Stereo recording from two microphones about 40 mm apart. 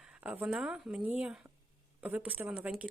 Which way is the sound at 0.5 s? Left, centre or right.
Centre.